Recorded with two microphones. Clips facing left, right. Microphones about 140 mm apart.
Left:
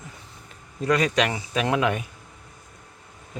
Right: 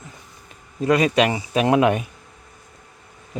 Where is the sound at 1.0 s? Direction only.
10° right (ahead or behind).